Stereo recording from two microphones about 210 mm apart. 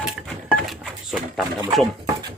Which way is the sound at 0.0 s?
Centre (ahead or behind).